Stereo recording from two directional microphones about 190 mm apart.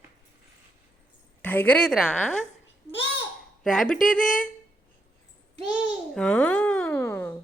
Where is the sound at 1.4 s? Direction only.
10° left (ahead or behind).